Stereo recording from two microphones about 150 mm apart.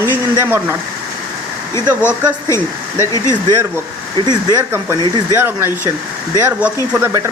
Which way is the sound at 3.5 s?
15° right (ahead or behind).